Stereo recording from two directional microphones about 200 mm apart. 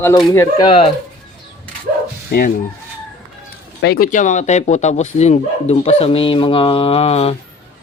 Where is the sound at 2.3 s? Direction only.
50° left (ahead or behind).